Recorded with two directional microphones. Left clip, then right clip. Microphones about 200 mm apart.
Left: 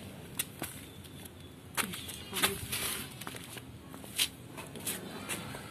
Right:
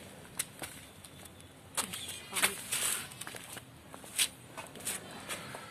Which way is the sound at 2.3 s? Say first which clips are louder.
Even; 45° right (ahead or behind).